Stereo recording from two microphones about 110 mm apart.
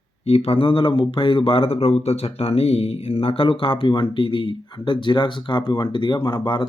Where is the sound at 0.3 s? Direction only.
65° left (ahead or behind).